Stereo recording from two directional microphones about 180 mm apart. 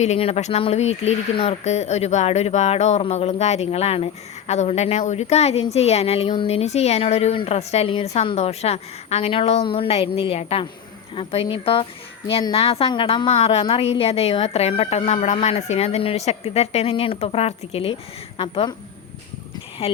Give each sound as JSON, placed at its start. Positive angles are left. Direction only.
{"t": 0.0, "sound": "a woman's voice", "side_deg": 35}
{"t": 19.8, "sound": "speech", "side_deg": 35}